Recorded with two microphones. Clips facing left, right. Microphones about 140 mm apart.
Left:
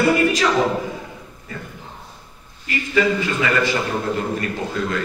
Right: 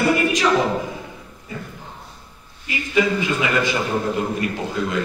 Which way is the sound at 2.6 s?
15° right (ahead or behind).